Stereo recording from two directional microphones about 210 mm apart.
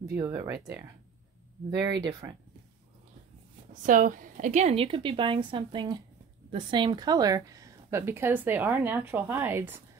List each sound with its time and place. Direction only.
0.1 s a woman's voice: 15° right (ahead or behind)
1.7 s a woman's voice: 20° right (ahead or behind)
3.8 s a woman's voice: 40° right (ahead or behind); by 9.8 s 10° right (ahead or behind)